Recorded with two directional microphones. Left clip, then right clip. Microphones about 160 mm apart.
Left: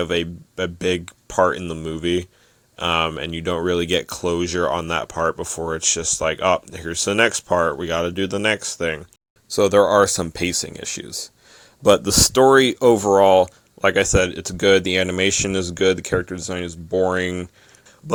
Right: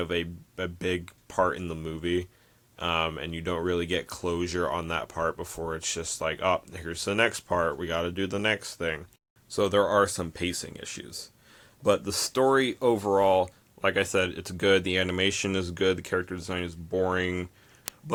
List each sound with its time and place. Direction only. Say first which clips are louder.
0.0 s speech: left 8 dB; 35° left (ahead or behind)
11.8 s speech: left 10 dB; 55° left (ahead or behind); by 17.3 s 35° left (ahead or behind)